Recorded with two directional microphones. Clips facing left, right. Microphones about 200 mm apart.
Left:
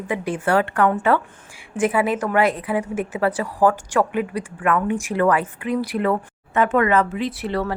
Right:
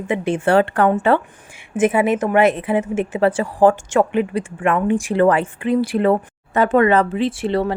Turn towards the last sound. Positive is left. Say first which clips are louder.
# right 5 dB
turn(degrees=-25)  # may be behind; listen again after turning